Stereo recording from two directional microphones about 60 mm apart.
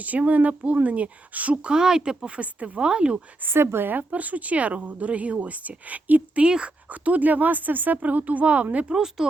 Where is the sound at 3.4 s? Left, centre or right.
Right.